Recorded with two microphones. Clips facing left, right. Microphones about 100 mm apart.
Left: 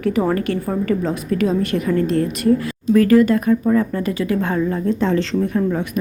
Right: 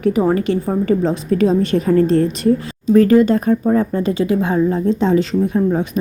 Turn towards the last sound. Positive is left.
turn(degrees=-20)  # may be behind; listen again after turning